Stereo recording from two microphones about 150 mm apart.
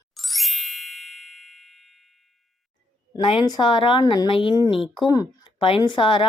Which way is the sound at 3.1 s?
30° left (ahead or behind).